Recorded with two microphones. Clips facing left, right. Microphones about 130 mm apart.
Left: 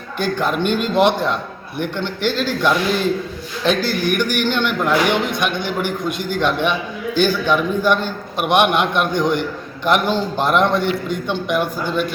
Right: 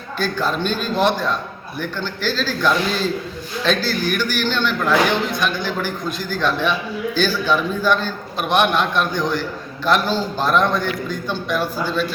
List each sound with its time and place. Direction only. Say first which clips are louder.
0.2 s a man's voice: left 2 dB; 15° left (ahead or behind)